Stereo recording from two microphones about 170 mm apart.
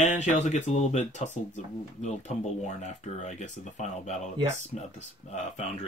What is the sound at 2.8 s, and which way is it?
Speech, 40° left (ahead or behind).